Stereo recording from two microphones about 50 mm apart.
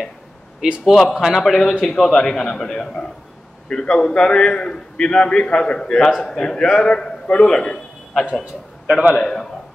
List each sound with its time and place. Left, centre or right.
0.6 s a man's voice: centre
0.9 s a man's voice: centre
9.1 s a man's voice: centre